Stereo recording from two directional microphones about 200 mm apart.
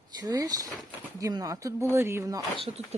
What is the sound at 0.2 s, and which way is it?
Speech, 20° right (ahead or behind).